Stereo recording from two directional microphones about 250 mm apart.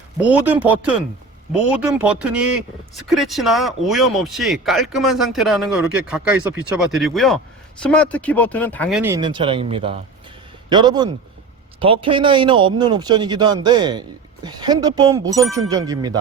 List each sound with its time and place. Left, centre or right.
0.2 s a man's voice: centre
9.0 s speech: centre